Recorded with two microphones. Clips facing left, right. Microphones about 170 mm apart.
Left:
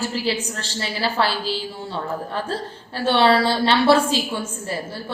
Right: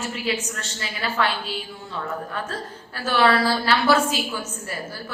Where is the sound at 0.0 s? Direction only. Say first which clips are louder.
Left 3 dB; 30° left (ahead or behind).